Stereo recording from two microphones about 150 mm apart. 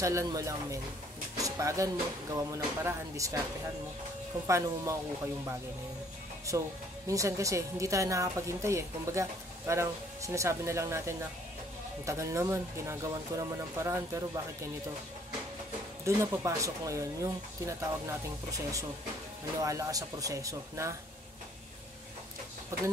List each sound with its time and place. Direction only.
0.0 s a woman's voice: 20° right (ahead or behind)
4.5 s a woman's voice: 20° right (ahead or behind)
6.5 s a woman's voice: 20° right (ahead or behind)
16.0 s a woman's voice: 20° right (ahead or behind)
19.6 s a woman's voice: 20° right (ahead or behind)